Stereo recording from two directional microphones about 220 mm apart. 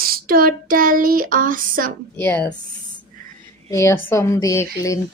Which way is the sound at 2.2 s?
10° left (ahead or behind).